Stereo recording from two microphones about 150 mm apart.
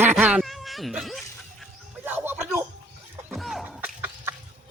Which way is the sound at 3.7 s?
10° right (ahead or behind).